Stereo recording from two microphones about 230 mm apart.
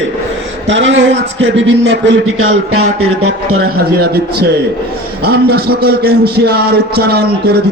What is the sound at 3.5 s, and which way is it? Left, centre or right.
Speech, right.